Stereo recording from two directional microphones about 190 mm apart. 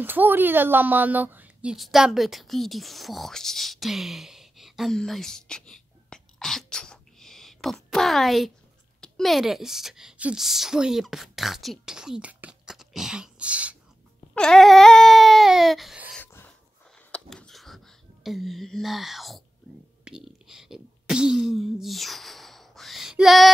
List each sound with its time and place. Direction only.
0.0 s a woman's voice: 10° right (ahead or behind)
14.3 s baby cry: 5° left (ahead or behind)
16.2 s a sound: 10° left (ahead or behind)